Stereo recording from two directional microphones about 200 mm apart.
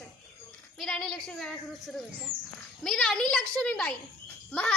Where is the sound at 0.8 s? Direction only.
Centre (ahead or behind).